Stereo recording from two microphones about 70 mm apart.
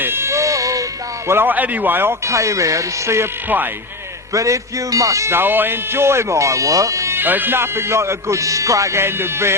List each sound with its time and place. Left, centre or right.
0.0 s a sound: right
1.3 s speech: right
2.2 s speech: right
4.4 s speech: right
5.3 s speech: right
7.2 s speech: right